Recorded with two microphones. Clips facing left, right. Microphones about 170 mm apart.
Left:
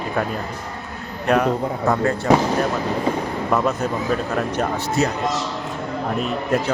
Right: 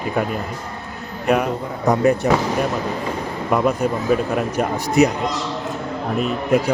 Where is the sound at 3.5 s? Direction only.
10° right (ahead or behind).